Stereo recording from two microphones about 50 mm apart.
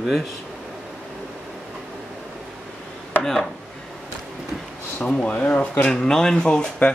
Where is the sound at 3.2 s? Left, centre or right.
Centre.